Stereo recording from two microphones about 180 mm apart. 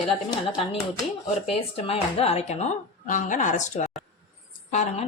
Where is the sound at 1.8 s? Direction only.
35° left (ahead or behind).